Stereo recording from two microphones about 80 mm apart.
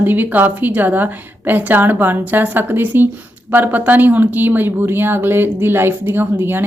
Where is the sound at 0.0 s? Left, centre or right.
Right.